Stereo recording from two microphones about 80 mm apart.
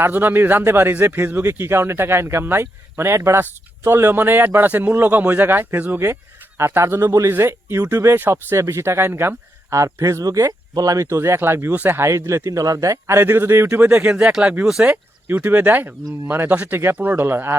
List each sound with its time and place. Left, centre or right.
0.0 s a man's voice: right